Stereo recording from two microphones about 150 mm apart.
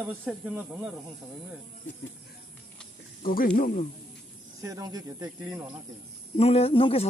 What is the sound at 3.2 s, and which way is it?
Speech, 70° left (ahead or behind).